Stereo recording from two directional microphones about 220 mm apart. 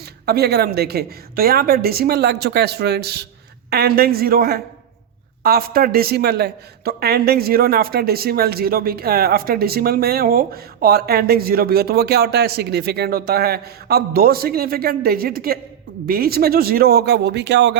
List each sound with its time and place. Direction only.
0.0 s a woman's voice: 45° right (ahead or behind)